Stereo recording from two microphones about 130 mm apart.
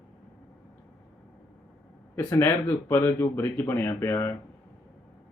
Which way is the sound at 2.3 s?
20° left (ahead or behind).